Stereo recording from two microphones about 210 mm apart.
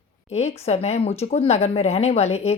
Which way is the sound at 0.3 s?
30° left (ahead or behind).